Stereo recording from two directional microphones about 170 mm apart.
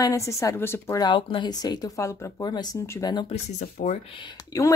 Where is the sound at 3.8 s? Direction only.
45° left (ahead or behind).